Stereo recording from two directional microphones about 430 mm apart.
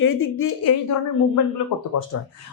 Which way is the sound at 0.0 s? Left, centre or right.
Left.